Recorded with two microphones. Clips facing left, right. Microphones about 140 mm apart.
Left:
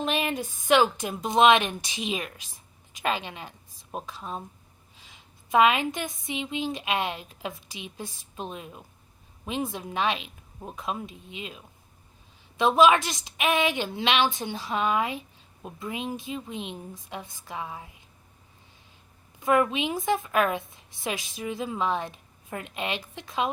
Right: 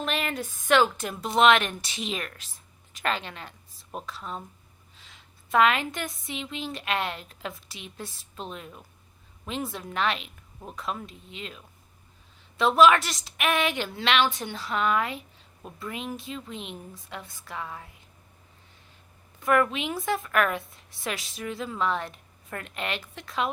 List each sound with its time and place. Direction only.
0.0 s a woman's voice: 20° left (ahead or behind)
19.4 s a woman's voice: 20° left (ahead or behind)